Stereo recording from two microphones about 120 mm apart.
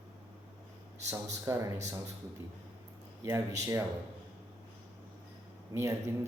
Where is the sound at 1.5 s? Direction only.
20° right (ahead or behind).